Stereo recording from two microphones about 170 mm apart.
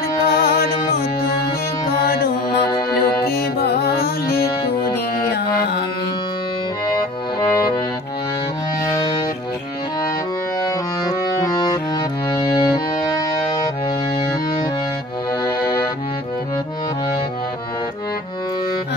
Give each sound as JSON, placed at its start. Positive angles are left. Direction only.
{"t": 0.3, "sound": "music", "side_deg": 65}
{"t": 2.0, "sound": "mantra", "side_deg": 60}
{"t": 3.2, "sound": "music", "side_deg": 65}
{"t": 6.9, "sound": "accordion", "side_deg": 25}
{"t": 8.8, "sound": "music", "side_deg": 20}
{"t": 11.1, "sound": "music", "side_deg": 25}